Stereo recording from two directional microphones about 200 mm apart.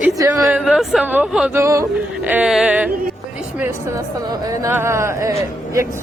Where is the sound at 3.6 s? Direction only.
15° right (ahead or behind).